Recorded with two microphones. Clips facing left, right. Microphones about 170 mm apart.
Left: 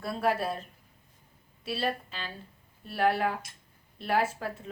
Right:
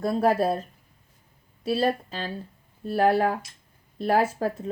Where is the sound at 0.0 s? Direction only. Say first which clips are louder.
Right 7 dB; 40° right (ahead or behind).